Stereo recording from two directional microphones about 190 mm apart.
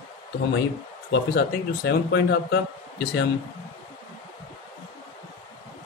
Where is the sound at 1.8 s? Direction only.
65° left (ahead or behind).